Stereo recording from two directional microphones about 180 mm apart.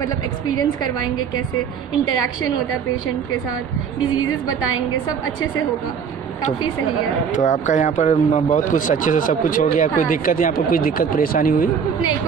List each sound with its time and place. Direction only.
7.3 s speech: 40° left (ahead or behind)